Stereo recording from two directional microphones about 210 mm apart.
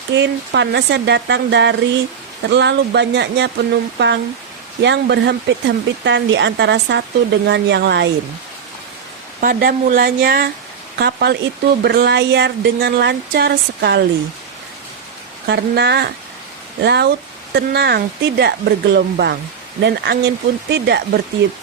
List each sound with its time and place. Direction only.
0.1 s speech: 55° right (ahead or behind)
9.4 s speech: 45° right (ahead or behind)
15.4 s speech: 55° right (ahead or behind)